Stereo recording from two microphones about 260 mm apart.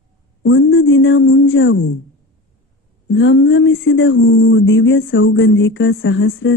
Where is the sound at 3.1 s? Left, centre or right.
Left.